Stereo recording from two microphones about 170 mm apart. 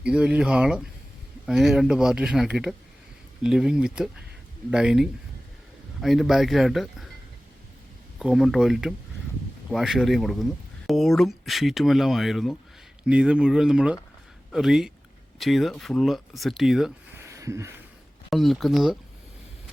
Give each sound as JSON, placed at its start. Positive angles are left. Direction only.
{"t": 0.0, "sound": "speech", "side_deg": -5}
{"t": 8.2, "sound": "speech", "side_deg": 0}
{"t": 17.2, "sound": "a sound", "side_deg": -15}
{"t": 18.3, "sound": "speech", "side_deg": 0}